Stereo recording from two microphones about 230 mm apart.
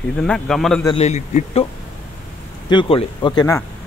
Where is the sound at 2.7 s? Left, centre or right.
Left.